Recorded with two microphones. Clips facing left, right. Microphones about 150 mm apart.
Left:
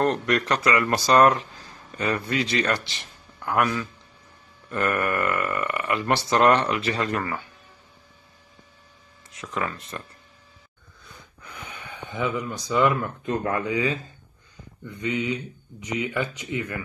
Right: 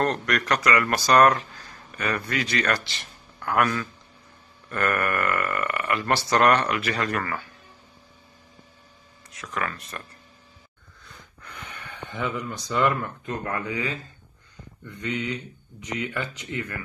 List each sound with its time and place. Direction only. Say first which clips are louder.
0.0 s speech: left 2 dB; 20° left (ahead or behind)
9.4 s speech: left 1 dB; 20° left (ahead or behind)
11.1 s a sound: left 1 dB; centre (ahead or behind)
13.2 s speech: left 4 dB; 25° left (ahead or behind)